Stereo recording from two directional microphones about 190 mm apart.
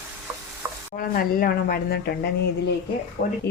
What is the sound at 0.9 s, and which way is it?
A woman's voice, 50° left (ahead or behind).